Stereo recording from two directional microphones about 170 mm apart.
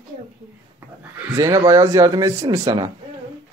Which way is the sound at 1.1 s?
15° right (ahead or behind).